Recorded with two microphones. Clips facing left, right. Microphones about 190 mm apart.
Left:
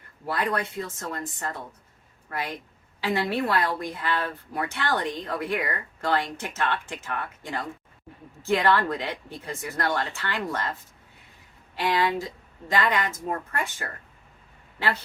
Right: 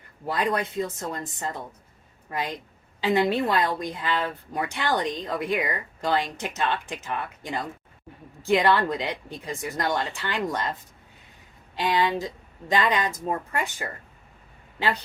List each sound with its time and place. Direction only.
0.3 s a woman's voice: 15° right (ahead or behind)
11.8 s a woman's voice: 15° right (ahead or behind)